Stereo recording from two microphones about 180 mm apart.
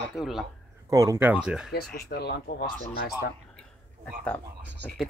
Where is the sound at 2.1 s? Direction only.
65° left (ahead or behind).